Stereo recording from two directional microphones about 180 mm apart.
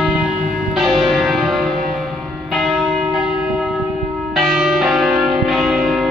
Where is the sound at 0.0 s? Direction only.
5° right (ahead or behind).